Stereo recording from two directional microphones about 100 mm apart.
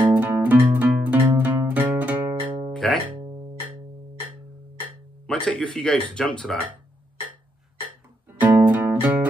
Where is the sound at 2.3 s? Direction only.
50° right (ahead or behind).